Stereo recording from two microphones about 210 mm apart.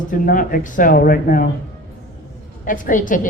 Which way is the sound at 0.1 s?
40° left (ahead or behind).